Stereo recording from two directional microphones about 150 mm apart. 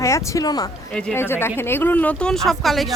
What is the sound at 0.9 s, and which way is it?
Speech, 10° left (ahead or behind).